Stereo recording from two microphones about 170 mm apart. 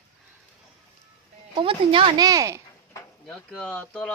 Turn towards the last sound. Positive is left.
turn(degrees=5)  # may be behind; listen again after turning